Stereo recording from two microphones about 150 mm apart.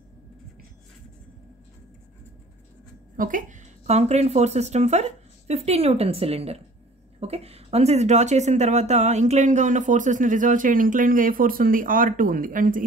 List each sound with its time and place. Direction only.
3.2 s a woman's voice: 65° right (ahead or behind)